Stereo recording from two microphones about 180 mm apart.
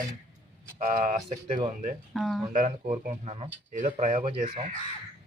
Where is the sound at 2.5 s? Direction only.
45° right (ahead or behind).